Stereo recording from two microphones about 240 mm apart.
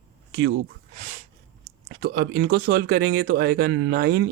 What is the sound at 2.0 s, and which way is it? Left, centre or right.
Speech, right.